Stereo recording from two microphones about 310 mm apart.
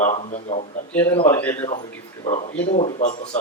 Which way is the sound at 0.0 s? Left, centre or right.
Left.